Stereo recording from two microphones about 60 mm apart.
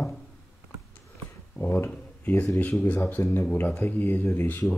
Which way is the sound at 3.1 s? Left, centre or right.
Left.